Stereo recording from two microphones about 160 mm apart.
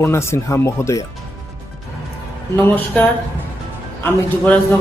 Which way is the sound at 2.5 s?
15° left (ahead or behind).